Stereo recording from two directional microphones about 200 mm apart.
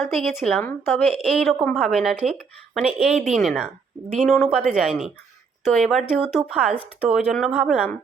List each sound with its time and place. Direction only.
0.0 s speech: centre (ahead or behind)